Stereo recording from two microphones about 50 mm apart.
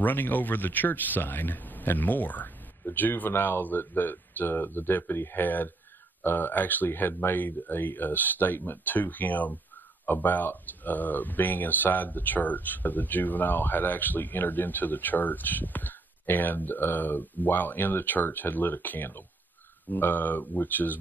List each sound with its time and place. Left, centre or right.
0.0 s speech: left